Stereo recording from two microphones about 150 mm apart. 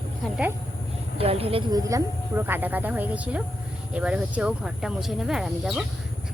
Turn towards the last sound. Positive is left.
turn(degrees=-5)  # may be behind; listen again after turning